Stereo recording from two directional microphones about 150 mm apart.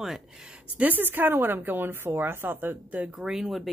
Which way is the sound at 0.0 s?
5° right (ahead or behind).